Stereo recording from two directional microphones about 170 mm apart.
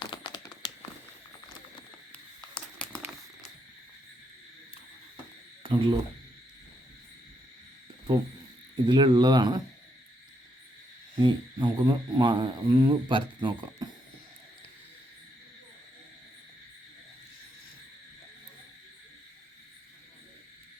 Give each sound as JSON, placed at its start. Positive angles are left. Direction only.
{"t": 0.0, "sound": "tap", "side_deg": 30}
{"t": 2.1, "sound": "a sound", "side_deg": 5}
{"t": 5.6, "sound": "speech", "side_deg": -30}
{"t": 8.7, "sound": "speech", "side_deg": -25}
{"t": 11.2, "sound": "speech", "side_deg": -30}